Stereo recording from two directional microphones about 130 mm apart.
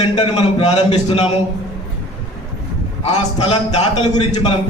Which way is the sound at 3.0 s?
50° left (ahead or behind).